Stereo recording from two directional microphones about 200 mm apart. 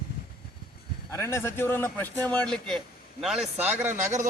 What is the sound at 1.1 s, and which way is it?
A man's voice, 15° left (ahead or behind).